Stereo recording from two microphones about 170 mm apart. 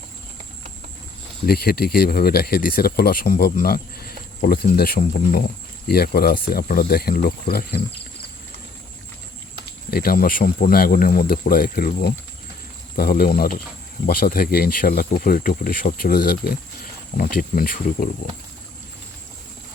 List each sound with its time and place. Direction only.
1.5 s speech: 65° left (ahead or behind)
9.9 s speech: 60° left (ahead or behind)